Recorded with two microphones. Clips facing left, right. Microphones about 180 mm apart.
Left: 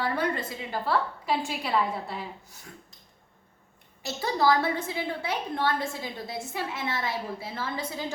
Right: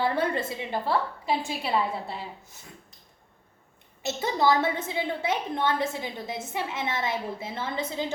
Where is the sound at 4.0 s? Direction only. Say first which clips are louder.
Right 1 dB; 20° right (ahead or behind).